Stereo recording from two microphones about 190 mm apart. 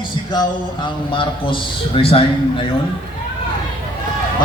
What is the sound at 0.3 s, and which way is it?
A man's voice, 25° left (ahead or behind).